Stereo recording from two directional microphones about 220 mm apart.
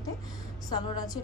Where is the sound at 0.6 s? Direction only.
20° left (ahead or behind).